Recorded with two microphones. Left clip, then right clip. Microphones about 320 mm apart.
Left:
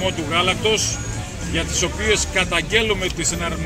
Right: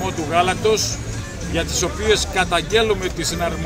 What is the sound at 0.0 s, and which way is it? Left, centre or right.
Speech, centre.